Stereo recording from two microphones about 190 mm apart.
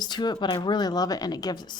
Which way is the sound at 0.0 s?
20° left (ahead or behind).